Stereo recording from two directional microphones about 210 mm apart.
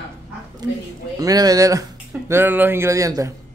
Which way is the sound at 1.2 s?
15° right (ahead or behind).